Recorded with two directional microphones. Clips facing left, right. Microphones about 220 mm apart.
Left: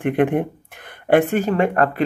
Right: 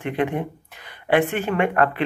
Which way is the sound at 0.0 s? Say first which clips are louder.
Left 6 dB; 50° left (ahead or behind).